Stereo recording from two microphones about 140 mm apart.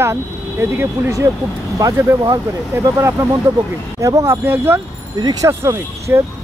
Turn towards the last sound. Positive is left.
turn(degrees=-20)  # may be behind; listen again after turning